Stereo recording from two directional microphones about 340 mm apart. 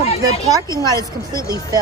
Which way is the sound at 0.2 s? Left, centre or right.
Centre.